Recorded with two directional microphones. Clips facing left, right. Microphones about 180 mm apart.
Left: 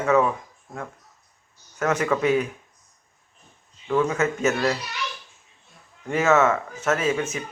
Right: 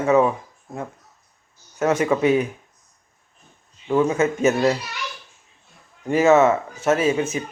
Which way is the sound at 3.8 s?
20° right (ahead or behind).